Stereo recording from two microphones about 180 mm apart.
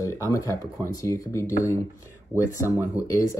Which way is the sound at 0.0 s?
15° left (ahead or behind).